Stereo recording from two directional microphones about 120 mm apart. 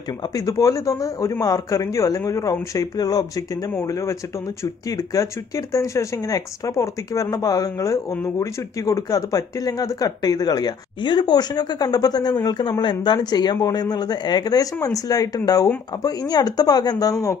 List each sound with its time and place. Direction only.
0.5 s speech: 25° left (ahead or behind)
4.9 s speech: 25° left (ahead or behind)